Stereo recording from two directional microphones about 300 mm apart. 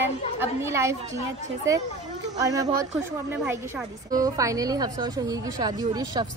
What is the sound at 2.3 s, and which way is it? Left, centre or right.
A woman's voice, centre.